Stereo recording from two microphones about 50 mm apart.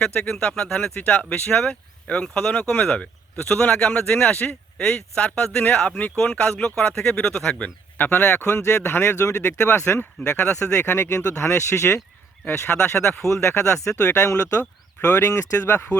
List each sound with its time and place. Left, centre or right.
0.0 s speech: centre
6.2 s speech: left
6.5 s speech: centre
7.9 s speech: left
9.9 s speech: left
12.6 s speech: left
14.2 s speech: left
15.0 s speech: left
15.3 s speech: left